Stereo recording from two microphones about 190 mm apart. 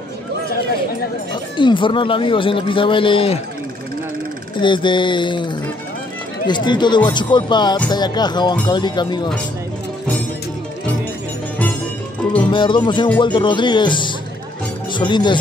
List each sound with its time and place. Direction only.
1.3 s speech: 25° left (ahead or behind)
4.6 s speech: 25° left (ahead or behind)
12.4 s speech: 25° left (ahead or behind)